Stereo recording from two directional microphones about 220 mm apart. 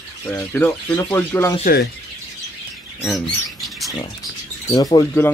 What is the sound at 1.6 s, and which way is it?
Speech, 45° left (ahead or behind).